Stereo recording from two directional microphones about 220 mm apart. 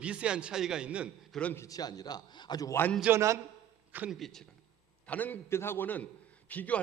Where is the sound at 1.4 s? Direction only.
10° left (ahead or behind).